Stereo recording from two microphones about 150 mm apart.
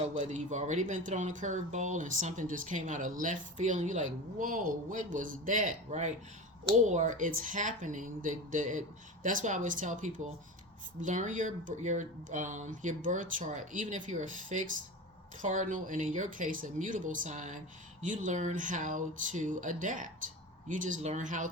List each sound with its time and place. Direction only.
0.2 s speech: 50° right (ahead or behind)